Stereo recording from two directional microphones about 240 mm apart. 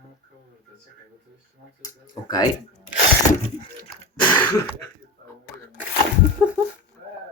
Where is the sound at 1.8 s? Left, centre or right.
Centre.